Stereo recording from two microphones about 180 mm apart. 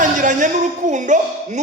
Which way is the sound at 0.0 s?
45° right (ahead or behind).